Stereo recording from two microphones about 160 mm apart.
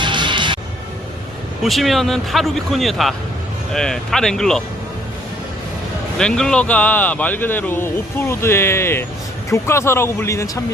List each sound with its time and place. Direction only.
0.0 s music: 30° right (ahead or behind)
1.6 s a man's voice: centre (ahead or behind)
6.1 s speech: 5° left (ahead or behind); by 10.6 s 20° left (ahead or behind)